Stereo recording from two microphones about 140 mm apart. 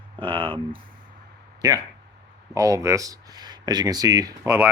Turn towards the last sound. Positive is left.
turn(degrees=-15)  # may be behind; listen again after turning